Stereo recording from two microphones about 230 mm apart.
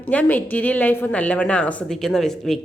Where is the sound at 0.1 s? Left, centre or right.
Centre.